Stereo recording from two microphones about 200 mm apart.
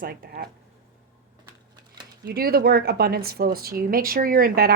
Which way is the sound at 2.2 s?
50° right (ahead or behind).